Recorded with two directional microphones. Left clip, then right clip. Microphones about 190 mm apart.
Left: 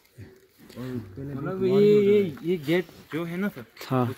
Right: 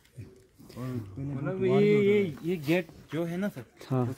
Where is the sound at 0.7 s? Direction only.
25° right (ahead or behind).